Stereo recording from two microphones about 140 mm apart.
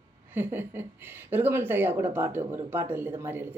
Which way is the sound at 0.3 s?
15° right (ahead or behind).